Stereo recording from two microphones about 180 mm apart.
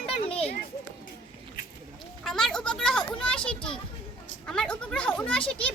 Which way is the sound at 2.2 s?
Centre (ahead or behind).